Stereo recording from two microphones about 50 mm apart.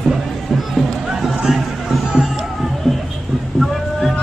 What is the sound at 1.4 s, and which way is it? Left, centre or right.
Music, centre.